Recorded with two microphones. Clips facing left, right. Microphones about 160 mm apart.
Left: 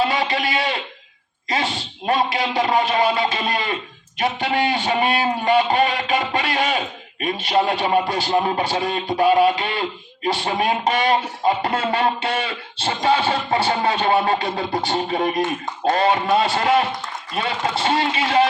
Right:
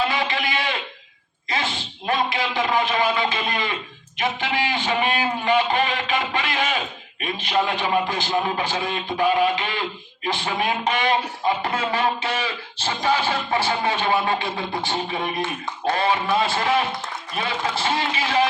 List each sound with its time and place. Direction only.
0.0 s a sound: 35° left (ahead or behind)
1.5 s a man's voice: 35° left (ahead or behind)
18.1 s a man's voice: 30° left (ahead or behind)